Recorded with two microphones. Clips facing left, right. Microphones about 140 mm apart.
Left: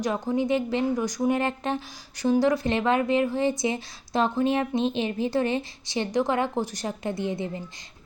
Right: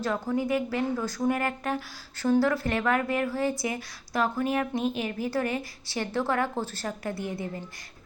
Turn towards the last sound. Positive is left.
turn(degrees=20)  # may be behind; listen again after turning